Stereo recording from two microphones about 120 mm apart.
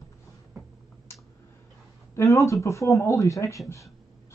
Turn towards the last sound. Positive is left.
turn(degrees=25)  # may be behind; listen again after turning